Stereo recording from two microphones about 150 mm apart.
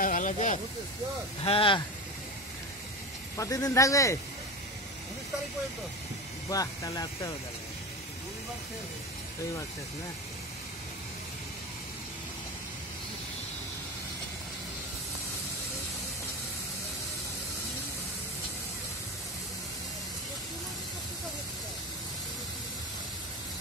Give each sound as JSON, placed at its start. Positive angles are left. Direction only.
{"t": 0.0, "sound": "speech", "side_deg": 60}
{"t": 1.4, "sound": "speech", "side_deg": 40}
{"t": 3.3, "sound": "speech", "side_deg": 20}
{"t": 6.5, "sound": "speech", "side_deg": 25}